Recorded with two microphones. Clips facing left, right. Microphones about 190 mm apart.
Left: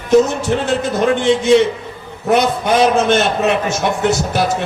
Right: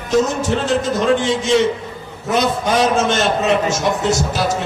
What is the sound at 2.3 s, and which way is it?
A man's voice, 60° left (ahead or behind).